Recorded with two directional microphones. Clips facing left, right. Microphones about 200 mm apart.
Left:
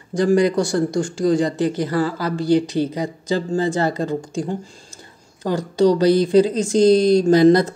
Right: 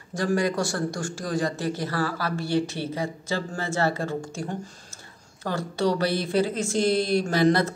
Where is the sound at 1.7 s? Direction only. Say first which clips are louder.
Left 7 dB; 20° left (ahead or behind).